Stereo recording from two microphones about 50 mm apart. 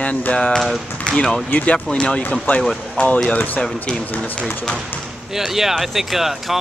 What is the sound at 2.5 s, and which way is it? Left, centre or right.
Speech, left.